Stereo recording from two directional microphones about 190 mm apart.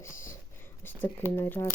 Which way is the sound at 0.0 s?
15° left (ahead or behind).